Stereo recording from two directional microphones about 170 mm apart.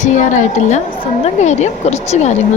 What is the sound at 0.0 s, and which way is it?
A woman's voice, 45° left (ahead or behind).